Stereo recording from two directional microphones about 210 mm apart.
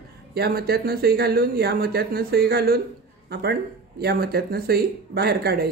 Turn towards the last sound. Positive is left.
turn(degrees=-50)  # may be behind; listen again after turning